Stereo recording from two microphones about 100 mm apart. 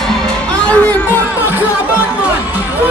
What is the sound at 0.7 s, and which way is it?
Chatter, 15° left (ahead or behind).